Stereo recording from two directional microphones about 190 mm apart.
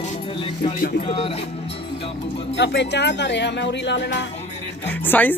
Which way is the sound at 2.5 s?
65° left (ahead or behind).